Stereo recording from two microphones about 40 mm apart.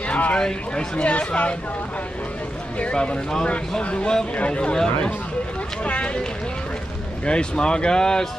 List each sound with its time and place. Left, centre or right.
0.1 s speech: left
1.0 s speech: left
2.8 s speech: left
3.4 s speech: left
5.9 s speech: left
7.2 s speech: left